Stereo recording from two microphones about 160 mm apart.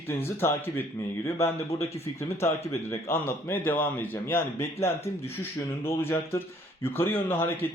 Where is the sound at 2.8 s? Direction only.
15° left (ahead or behind).